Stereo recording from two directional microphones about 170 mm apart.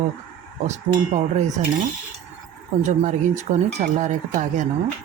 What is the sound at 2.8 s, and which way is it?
Speech, 45° right (ahead or behind).